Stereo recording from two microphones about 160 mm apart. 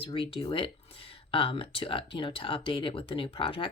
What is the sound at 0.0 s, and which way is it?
Speech, 35° left (ahead or behind).